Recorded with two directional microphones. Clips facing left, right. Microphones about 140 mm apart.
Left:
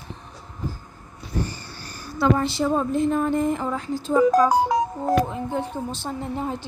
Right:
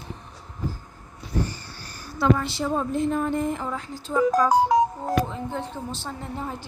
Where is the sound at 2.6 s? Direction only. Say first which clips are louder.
Left 2 dB; 40° left (ahead or behind).